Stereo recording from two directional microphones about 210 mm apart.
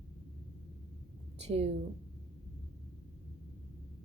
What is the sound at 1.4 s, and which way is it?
Speech, 30° right (ahead or behind).